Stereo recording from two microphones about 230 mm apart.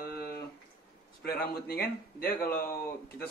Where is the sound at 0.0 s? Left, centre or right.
Left.